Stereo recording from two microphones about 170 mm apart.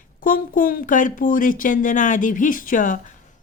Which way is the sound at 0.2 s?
55° left (ahead or behind).